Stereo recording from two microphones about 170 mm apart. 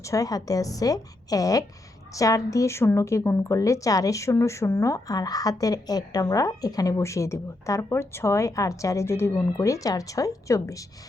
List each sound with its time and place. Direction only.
0.0 s a woman's voice: 20° left (ahead or behind)